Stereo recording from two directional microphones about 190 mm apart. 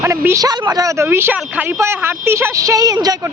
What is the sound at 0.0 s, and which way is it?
Speech, 15° right (ahead or behind).